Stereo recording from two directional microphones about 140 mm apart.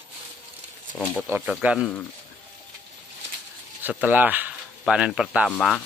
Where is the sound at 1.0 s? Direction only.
15° right (ahead or behind).